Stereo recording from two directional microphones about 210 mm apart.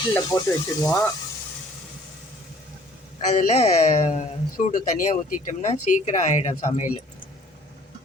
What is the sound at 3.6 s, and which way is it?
Speech, 30° left (ahead or behind).